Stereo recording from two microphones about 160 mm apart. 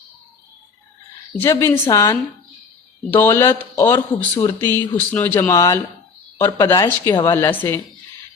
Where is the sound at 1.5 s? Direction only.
20° left (ahead or behind).